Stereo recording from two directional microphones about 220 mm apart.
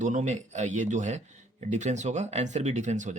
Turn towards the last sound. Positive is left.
turn(degrees=-35)  # may be behind; listen again after turning